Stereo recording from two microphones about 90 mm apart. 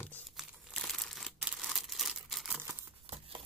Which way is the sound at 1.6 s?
Centre (ahead or behind).